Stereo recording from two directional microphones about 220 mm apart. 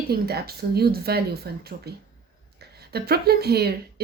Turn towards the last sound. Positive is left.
turn(degrees=-45)  # may be behind; listen again after turning